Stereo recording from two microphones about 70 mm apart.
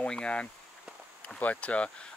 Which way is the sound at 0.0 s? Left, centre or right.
Centre.